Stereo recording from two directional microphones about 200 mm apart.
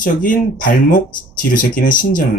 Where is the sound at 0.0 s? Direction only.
45° left (ahead or behind).